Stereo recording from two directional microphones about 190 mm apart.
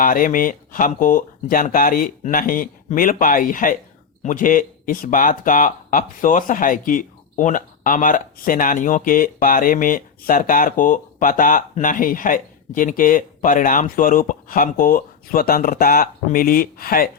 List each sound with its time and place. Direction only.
0.0 s speech: 45° left (ahead or behind)